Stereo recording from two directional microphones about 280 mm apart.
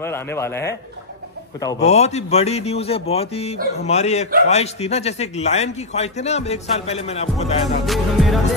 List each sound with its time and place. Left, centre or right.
0.0 s a man's voice: centre
1.9 s a man's voice: left
7.6 s music: centre